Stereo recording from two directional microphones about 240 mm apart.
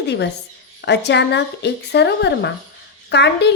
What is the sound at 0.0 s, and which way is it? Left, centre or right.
A woman's voice, left.